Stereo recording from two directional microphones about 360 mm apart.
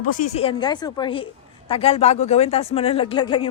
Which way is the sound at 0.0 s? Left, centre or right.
Left.